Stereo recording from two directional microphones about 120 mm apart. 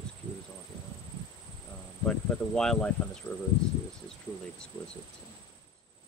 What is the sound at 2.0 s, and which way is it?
Speech, 10° left (ahead or behind).